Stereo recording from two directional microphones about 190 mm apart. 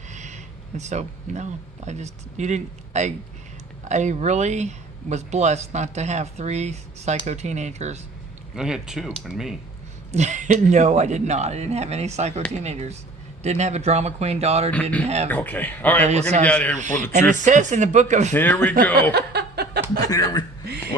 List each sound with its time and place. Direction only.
0.1 s a sound: 40° right (ahead or behind)
0.8 s speech: 35° right (ahead or behind)
8.5 s speech: 5° right (ahead or behind)
10.1 s speech: 40° right (ahead or behind)
14.7 s speech: 10° left (ahead or behind)
16.8 s speech: 40° right (ahead or behind)
18.3 s speech: 10° left (ahead or behind)
19.1 s chuckle: 60° right (ahead or behind)
20.1 s speech: 20° left (ahead or behind)